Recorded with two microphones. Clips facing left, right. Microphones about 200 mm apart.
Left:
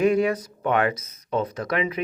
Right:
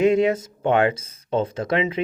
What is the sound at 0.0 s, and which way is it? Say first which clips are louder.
Speech: right 3 dB; 25° right (ahead or behind).